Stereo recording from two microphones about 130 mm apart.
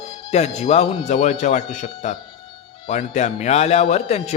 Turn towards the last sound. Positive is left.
turn(degrees=60)  # may be behind; listen again after turning